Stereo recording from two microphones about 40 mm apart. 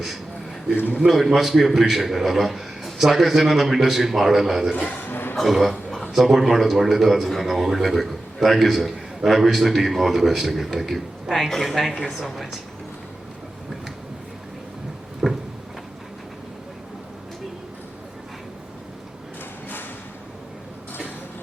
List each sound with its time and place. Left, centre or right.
0.9 s a man's voice: centre
4.9 s a man's voice: left
5.4 s a man's voice: centre
15.2 s a sound: right